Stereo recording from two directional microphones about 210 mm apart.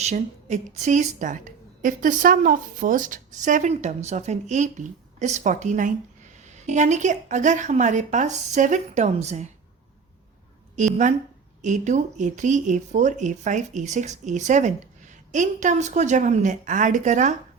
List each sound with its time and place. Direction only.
0.0 s speech: 35° right (ahead or behind)
10.8 s speech: 35° right (ahead or behind)